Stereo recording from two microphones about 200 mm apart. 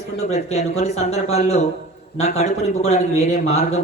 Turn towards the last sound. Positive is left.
turn(degrees=35)  # may be behind; listen again after turning